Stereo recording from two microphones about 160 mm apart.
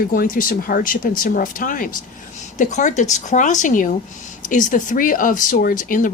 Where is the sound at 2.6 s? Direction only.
50° left (ahead or behind).